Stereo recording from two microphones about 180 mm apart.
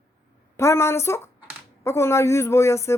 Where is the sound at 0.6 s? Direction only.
15° left (ahead or behind).